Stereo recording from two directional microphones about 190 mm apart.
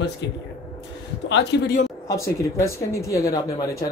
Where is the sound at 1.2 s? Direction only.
65° left (ahead or behind).